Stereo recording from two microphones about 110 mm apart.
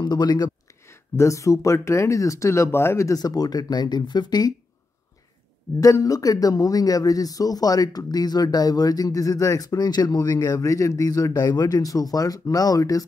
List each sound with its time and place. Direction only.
0.0 s speech: 40° left (ahead or behind)
0.8 s speech: 25° left (ahead or behind)
5.8 s speech: 35° left (ahead or behind)